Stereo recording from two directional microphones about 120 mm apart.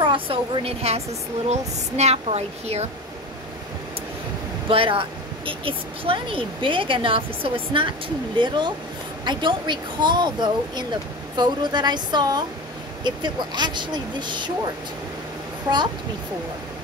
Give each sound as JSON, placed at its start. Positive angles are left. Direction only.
{"t": 0.0, "sound": "a woman's voice", "side_deg": -45}
{"t": 4.6, "sound": "speech", "side_deg": -50}